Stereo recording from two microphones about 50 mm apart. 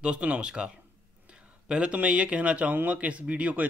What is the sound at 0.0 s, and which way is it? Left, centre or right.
Speech, right.